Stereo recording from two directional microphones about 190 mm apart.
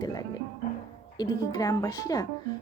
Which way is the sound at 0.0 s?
20° left (ahead or behind).